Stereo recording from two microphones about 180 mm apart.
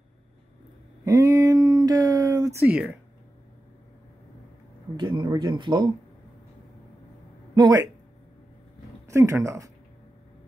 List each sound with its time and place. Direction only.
1.0 s a sound: 15° right (ahead or behind)
4.9 s speech: 25° right (ahead or behind)
7.5 s speech: 20° right (ahead or behind)
9.1 s speech: 15° right (ahead or behind)